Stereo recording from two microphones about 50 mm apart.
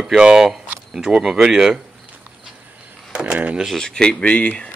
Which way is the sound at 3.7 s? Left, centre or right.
Centre.